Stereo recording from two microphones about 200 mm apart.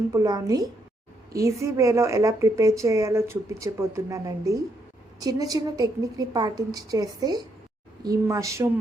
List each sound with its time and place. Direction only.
0.1 s a woman's voice: 15° right (ahead or behind)